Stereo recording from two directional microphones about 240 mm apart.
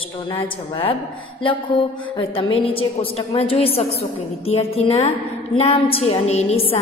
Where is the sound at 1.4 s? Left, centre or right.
Left.